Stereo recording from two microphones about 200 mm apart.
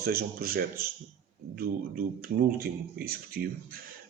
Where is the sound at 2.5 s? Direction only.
50° right (ahead or behind).